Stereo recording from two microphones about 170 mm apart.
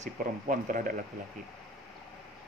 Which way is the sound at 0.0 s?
50° right (ahead or behind).